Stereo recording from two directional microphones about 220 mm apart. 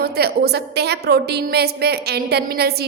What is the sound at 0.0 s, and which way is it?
A woman's voice, 45° right (ahead or behind).